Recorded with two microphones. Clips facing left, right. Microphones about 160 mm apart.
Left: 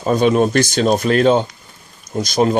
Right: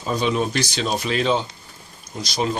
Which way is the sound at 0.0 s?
50° left (ahead or behind).